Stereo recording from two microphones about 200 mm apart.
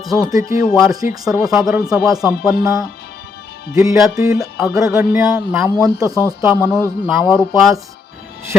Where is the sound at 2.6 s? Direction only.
15° right (ahead or behind).